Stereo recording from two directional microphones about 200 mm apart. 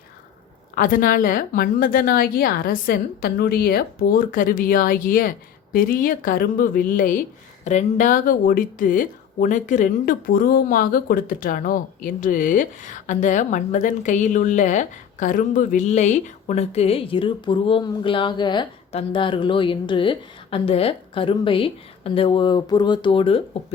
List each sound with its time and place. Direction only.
0.8 s a woman's voice: 45° left (ahead or behind); by 23.4 s 25° left (ahead or behind)